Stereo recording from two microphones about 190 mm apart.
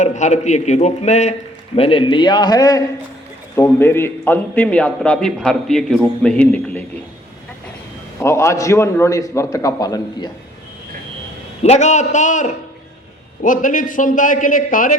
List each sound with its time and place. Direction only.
0.0 s a man's voice: 40° left (ahead or behind); by 6.8 s 10° left (ahead or behind)
8.2 s a man's voice: 15° left (ahead or behind)
11.6 s a man's voice: 40° left (ahead or behind)